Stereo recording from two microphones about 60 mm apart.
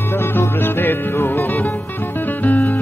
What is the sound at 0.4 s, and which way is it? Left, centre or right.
Music, left.